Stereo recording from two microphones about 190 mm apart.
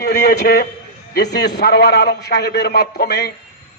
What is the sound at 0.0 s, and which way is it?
A man's voice, 55° left (ahead or behind).